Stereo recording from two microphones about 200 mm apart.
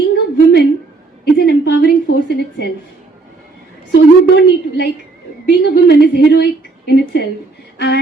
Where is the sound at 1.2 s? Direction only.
50° left (ahead or behind).